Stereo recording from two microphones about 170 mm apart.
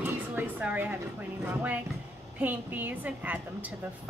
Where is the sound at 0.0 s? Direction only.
10° right (ahead or behind).